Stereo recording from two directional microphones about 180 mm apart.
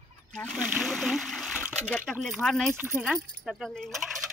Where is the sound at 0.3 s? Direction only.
5° left (ahead or behind).